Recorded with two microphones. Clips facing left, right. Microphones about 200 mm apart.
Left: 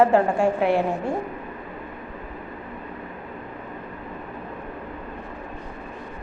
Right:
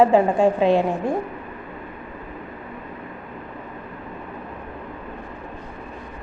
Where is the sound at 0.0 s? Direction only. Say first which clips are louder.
Right 2 dB; 15° right (ahead or behind).